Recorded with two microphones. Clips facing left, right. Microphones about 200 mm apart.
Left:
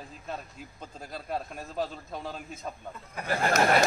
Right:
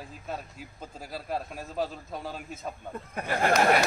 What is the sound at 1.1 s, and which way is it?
A man's voice, centre (ahead or behind).